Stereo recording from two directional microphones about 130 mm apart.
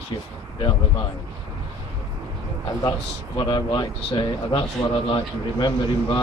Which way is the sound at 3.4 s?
35° left (ahead or behind).